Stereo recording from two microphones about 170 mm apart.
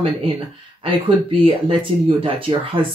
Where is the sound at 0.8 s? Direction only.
30° right (ahead or behind).